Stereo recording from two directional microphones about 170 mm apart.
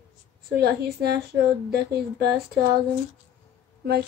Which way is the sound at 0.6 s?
70° right (ahead or behind).